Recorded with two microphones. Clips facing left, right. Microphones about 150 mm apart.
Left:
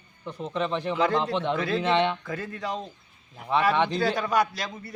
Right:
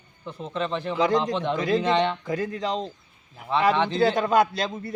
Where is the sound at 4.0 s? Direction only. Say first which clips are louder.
Right 4 dB; 20° right (ahead or behind).